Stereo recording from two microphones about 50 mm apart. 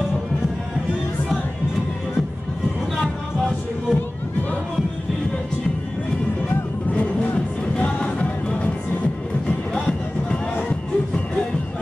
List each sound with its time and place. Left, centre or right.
3.0 s music: centre
6.9 s music: left